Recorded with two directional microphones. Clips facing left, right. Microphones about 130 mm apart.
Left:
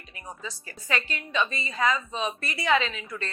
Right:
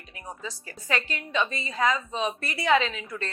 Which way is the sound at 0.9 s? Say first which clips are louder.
Right 1 dB; 45° right (ahead or behind).